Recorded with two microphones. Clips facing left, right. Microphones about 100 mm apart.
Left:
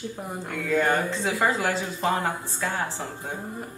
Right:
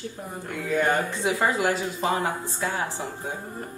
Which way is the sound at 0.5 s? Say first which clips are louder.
Even; 20° right (ahead or behind).